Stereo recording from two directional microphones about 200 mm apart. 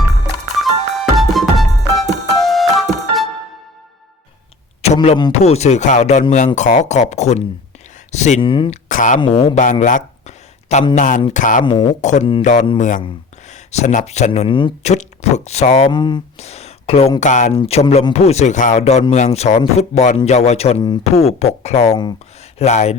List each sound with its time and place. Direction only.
0.6 s music: centre (ahead or behind)
4.9 s speech: 20° left (ahead or behind)
5.4 s speech: 35° left (ahead or behind)
8.7 s speech: 40° left (ahead or behind)
9.2 s speech: 25° left (ahead or behind)
9.8 s a sound: 35° left (ahead or behind)
10.9 s speech: 40° left (ahead or behind)
11.6 s speech: 25° left (ahead or behind)
12.0 s speech: 35° left (ahead or behind)
15.9 s speech: 20° left (ahead or behind); by 17.6 s 40° left (ahead or behind)
17.6 s speech: 25° left (ahead or behind)